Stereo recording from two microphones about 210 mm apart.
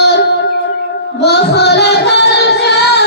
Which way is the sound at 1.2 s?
50° left (ahead or behind).